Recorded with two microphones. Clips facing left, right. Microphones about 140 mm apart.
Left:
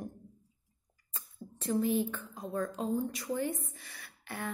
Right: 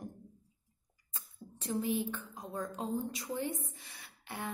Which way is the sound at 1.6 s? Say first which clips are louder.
Left 4 dB; 15° right (ahead or behind).